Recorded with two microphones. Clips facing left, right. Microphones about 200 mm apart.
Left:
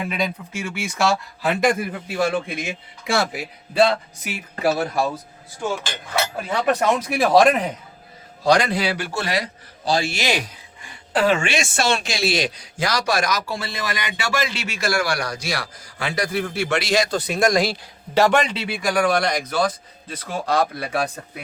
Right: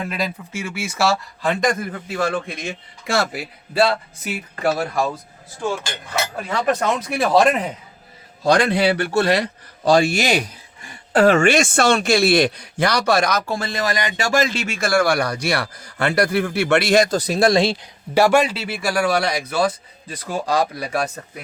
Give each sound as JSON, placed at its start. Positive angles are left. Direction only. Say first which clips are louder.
{"t": 0.0, "sound": "speech", "louder": "even", "side_deg": 0}
{"t": 6.5, "sound": "speech", "louder": "left 1 dB", "side_deg": 5}
{"t": 8.4, "sound": "a man's voice", "louder": "right 2 dB", "side_deg": -55}
{"t": 10.1, "sound": "a man's voice", "louder": "right 4 dB", "side_deg": -45}
{"t": 14.0, "sound": "a man's voice", "louder": "right 5 dB", "side_deg": -45}
{"t": 18.1, "sound": "speech", "louder": "right 2 dB", "side_deg": -10}